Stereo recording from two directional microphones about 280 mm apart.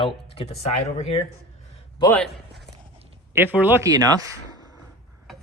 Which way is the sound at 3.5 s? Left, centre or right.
Centre.